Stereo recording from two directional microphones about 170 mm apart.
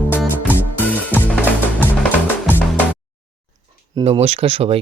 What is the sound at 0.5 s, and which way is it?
Music, 10° left (ahead or behind).